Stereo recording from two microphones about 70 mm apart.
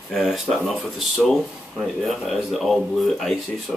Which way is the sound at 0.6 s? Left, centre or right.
Centre.